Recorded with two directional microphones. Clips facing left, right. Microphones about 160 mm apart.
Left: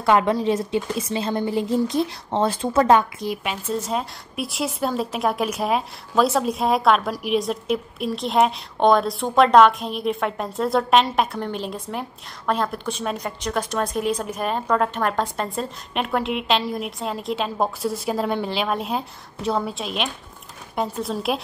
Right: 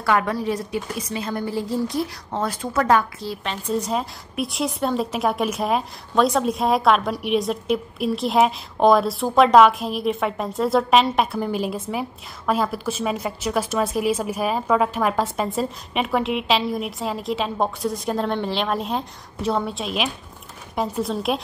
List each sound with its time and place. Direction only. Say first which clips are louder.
0.0 s a woman's voice: left 3 dB; 20° left (ahead or behind)
3.6 s a woman's voice: right 3 dB; centre (ahead or behind)